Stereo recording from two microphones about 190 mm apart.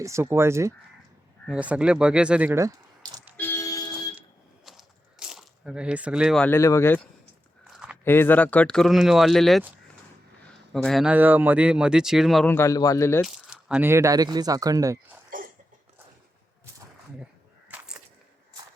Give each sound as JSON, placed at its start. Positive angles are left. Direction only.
{"t": 0.0, "sound": "speech", "side_deg": -15}
{"t": 3.3, "sound": "a sound", "side_deg": 10}
{"t": 4.6, "sound": "biting", "side_deg": -5}
{"t": 6.4, "sound": "a man's voice", "side_deg": 15}
{"t": 7.7, "sound": "biting", "side_deg": -5}
{"t": 8.0, "sound": "speech", "side_deg": 10}
{"t": 12.5, "sound": "a man's voice", "side_deg": 15}
{"t": 13.2, "sound": "speech", "side_deg": -5}
{"t": 15.3, "sound": "a sound", "side_deg": -45}
{"t": 17.7, "sound": "a sound", "side_deg": -5}